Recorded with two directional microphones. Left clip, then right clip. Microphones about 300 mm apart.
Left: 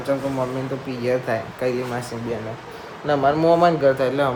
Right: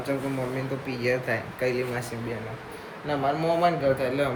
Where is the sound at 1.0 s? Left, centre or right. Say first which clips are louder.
Left 4 dB; centre.